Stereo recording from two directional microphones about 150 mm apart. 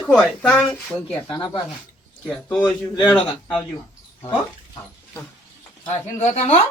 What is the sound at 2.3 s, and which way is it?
Speech, 10° left (ahead or behind).